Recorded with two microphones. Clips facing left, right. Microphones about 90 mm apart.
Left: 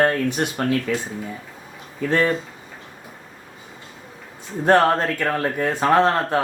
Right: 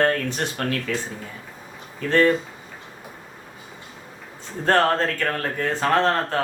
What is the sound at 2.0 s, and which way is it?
Speech, 15° left (ahead or behind).